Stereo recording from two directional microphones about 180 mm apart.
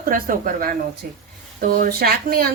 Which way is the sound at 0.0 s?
50° right (ahead or behind).